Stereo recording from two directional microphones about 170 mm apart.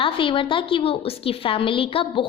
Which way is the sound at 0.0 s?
30° left (ahead or behind).